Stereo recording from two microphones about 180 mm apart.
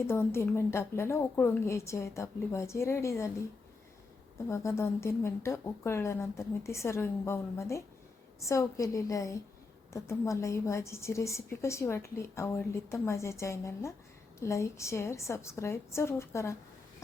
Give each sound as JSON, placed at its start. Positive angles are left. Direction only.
{"t": 0.1, "sound": "a woman's voice", "side_deg": 15}
{"t": 4.4, "sound": "a woman's voice", "side_deg": 15}